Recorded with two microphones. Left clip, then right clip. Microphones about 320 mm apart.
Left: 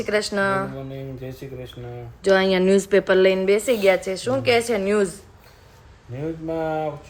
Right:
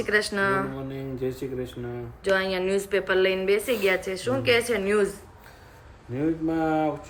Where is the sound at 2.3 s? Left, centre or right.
Centre.